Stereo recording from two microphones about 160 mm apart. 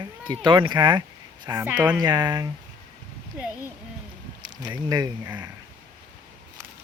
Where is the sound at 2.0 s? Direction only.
25° right (ahead or behind).